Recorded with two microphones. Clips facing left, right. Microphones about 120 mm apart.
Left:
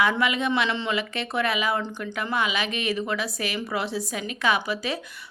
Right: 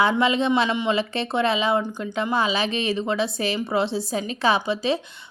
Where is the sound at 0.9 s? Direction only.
30° right (ahead or behind).